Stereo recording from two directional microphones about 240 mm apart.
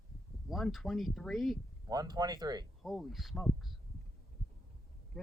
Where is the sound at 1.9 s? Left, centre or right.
Centre.